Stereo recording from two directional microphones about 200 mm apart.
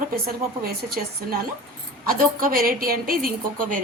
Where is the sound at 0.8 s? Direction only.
50° right (ahead or behind).